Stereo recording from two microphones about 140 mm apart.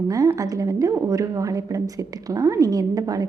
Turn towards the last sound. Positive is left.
turn(degrees=-25)  # may be behind; listen again after turning